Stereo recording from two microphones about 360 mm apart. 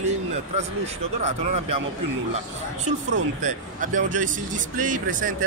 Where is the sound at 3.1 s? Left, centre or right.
Right.